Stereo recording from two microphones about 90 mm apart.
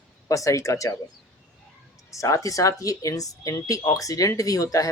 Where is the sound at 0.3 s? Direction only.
35° left (ahead or behind).